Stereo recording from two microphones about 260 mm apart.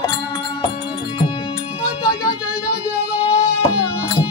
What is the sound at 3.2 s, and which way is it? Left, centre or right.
Music, left.